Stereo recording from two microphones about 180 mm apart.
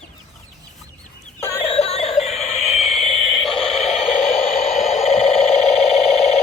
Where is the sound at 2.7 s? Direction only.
Centre (ahead or behind).